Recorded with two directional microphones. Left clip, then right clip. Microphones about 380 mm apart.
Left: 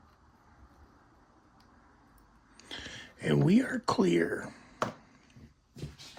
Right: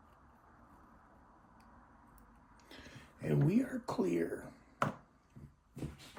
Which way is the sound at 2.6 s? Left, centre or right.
Centre.